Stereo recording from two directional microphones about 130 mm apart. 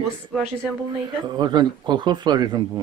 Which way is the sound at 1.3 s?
35° right (ahead or behind).